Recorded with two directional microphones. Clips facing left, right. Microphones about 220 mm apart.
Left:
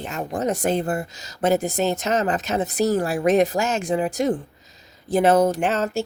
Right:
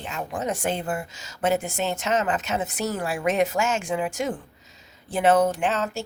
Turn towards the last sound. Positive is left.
turn(degrees=40)  # may be behind; listen again after turning